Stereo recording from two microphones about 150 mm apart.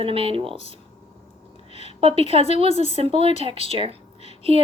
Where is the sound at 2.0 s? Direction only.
40° right (ahead or behind).